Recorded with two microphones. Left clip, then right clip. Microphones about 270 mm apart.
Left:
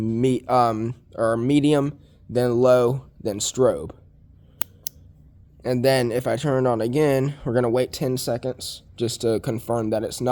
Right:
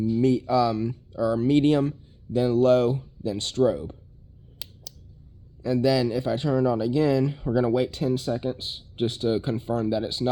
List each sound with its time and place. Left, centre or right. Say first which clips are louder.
0.0 s speech: left 1 dB; left
5.6 s speech: left 3 dB; left